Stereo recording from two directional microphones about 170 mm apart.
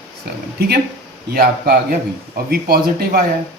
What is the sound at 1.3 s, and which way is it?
Speech, 65° right (ahead or behind).